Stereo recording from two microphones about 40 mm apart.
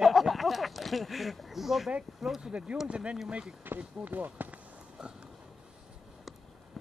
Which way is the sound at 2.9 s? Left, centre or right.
Right.